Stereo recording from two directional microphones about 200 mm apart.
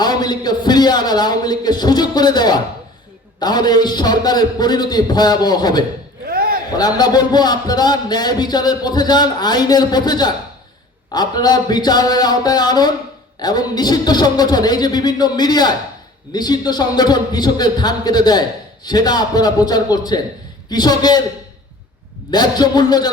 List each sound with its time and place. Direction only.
0.0 s a man's voice: 20° left (ahead or behind)
6.2 s a sound: 50° right (ahead or behind)
6.7 s speech: 20° left (ahead or behind)
22.3 s speech: 20° left (ahead or behind)